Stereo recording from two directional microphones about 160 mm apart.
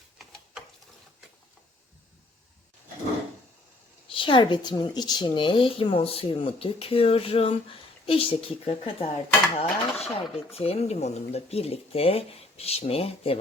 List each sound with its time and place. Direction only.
4.1 s speech: 30° left (ahead or behind)